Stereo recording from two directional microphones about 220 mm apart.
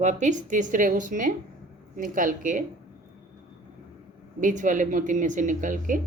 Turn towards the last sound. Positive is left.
turn(degrees=-35)  # may be behind; listen again after turning